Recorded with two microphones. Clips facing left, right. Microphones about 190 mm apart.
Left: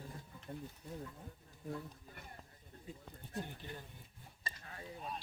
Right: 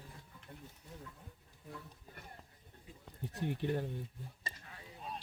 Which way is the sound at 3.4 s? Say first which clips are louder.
Right 14 dB; 75° right (ahead or behind).